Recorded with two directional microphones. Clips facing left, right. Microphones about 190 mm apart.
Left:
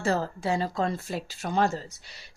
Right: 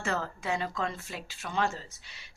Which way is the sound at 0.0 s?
35° left (ahead or behind).